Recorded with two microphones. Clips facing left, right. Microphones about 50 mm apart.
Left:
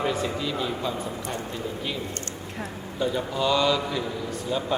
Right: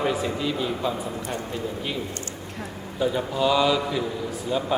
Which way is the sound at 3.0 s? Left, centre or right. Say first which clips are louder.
Right 2 dB; centre.